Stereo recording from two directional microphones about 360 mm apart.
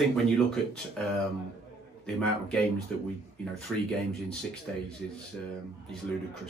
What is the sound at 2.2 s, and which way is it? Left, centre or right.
Speech, centre.